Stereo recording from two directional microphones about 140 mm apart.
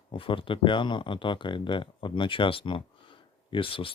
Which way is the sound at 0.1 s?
40° left (ahead or behind).